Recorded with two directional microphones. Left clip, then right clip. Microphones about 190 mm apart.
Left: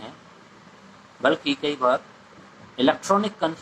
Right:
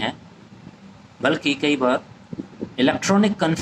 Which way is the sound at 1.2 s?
45° right (ahead or behind).